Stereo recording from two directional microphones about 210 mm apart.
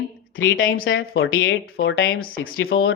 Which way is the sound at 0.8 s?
50° left (ahead or behind).